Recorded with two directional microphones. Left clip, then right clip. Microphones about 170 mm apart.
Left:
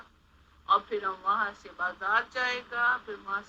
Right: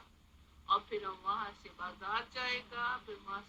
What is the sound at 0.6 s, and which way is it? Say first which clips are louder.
Speech: left 8 dB; 30° left (ahead or behind).